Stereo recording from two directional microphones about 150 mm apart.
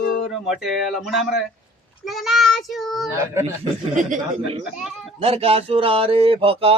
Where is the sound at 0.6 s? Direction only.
Centre (ahead or behind).